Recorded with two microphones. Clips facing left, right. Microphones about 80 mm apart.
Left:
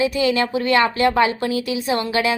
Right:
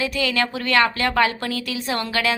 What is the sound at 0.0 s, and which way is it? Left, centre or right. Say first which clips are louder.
A woman's voice: left 4 dB; left.